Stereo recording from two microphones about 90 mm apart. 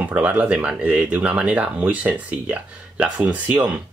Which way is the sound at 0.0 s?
20° right (ahead or behind).